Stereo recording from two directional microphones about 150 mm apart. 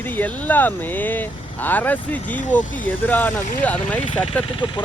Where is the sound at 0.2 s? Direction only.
10° left (ahead or behind).